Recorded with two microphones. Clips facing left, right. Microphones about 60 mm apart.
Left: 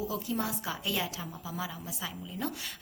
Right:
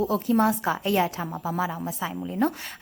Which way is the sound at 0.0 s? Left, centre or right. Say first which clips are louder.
Right 11 dB; right.